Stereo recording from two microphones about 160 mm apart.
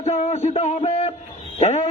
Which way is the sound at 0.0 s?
40° left (ahead or behind).